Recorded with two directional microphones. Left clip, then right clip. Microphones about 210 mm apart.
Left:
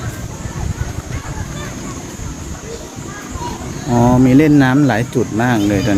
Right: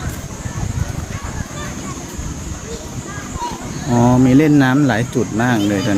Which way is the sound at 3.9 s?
10° left (ahead or behind).